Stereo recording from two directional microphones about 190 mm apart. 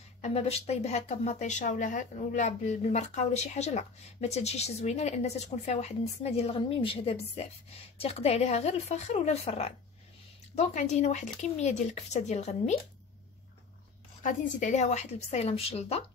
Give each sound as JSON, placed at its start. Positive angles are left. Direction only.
{"t": 0.2, "sound": "speech", "side_deg": 35}
{"t": 14.2, "sound": "speech", "side_deg": 40}